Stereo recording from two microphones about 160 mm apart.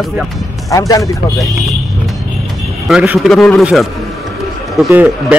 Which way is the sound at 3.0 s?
5° right (ahead or behind).